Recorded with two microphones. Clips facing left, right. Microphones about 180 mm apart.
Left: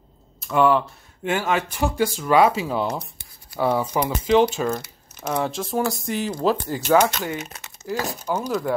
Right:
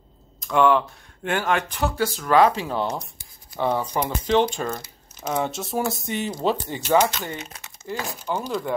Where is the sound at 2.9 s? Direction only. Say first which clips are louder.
Left 1 dB; 65° left (ahead or behind).